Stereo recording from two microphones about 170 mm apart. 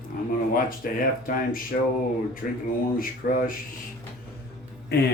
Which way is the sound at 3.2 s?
60° left (ahead or behind).